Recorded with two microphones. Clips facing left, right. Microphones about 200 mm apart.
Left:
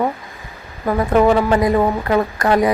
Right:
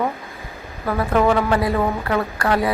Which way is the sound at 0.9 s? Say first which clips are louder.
Left 4 dB; 20° left (ahead or behind).